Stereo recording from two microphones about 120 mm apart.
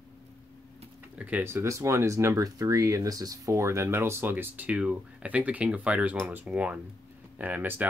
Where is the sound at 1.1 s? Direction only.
15° right (ahead or behind).